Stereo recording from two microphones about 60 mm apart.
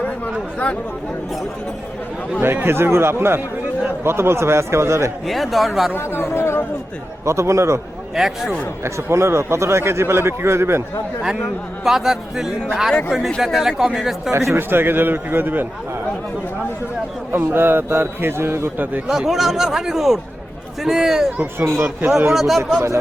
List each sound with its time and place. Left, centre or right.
2.4 s a man's voice: right
5.2 s speech: centre
5.9 s speech: left
7.3 s a man's voice: right
8.1 s speech: centre
8.8 s a man's voice: right
11.9 s speech: centre
14.5 s speech: right
17.5 s speech: right
19.0 s speech: centre
21.6 s a man's voice: right
22.3 s speech: centre